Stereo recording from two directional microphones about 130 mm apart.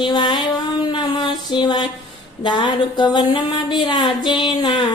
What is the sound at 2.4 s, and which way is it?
Music, 35° left (ahead or behind).